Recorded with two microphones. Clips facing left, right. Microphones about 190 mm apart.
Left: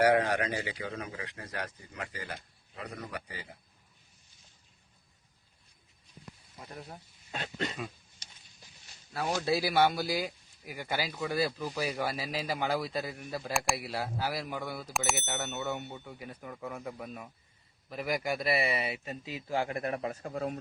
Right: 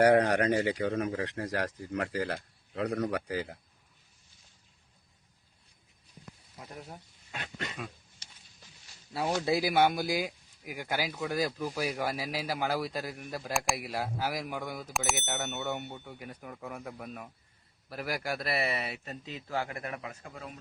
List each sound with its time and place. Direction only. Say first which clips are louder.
0.0 s a man's voice: right 3 dB; 50° right (ahead or behind); by 3.5 s 80° right
6.6 s speech: even; 5° right (ahead or behind)
7.3 s throat clearing: left 4 dB; 30° left (ahead or behind)
9.1 s a man's voice: right 1 dB; 15° right (ahead or behind)
14.8 s speech: even; centre (ahead or behind)
19.6 s a man's voice: left 6 dB; 30° left (ahead or behind); by 20.6 s 45° left (ahead or behind)